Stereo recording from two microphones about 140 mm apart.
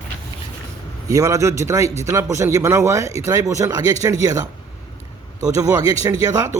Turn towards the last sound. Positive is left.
turn(degrees=-25)  # may be behind; listen again after turning